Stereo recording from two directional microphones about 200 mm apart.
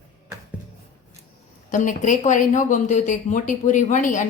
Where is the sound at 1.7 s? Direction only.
40° left (ahead or behind).